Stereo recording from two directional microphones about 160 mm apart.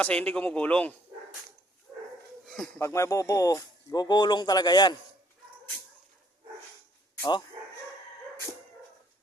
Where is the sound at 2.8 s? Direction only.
15° left (ahead or behind).